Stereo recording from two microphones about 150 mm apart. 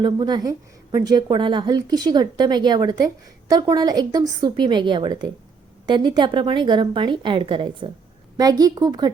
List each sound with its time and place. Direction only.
0.0 s a woman's voice: 30° right (ahead or behind)